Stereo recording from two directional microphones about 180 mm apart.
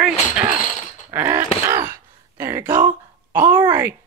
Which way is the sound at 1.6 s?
15° right (ahead or behind).